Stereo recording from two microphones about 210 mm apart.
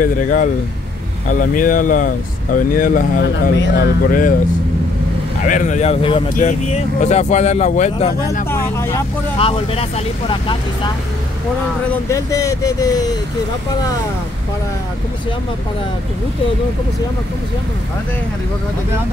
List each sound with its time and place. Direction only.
0.0 s speech: 40° left (ahead or behind)
3.3 s speech: 55° left (ahead or behind)
5.5 s speech: 35° left (ahead or behind)
8.5 s speech: 10° left (ahead or behind)
9.4 s speech: 25° left (ahead or behind)
12.1 s speech: 15° left (ahead or behind)